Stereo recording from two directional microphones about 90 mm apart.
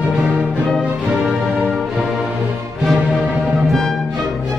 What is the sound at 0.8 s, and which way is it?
Music, centre (ahead or behind).